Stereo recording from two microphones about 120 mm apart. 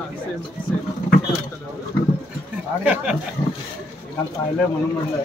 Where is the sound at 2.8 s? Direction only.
10° right (ahead or behind).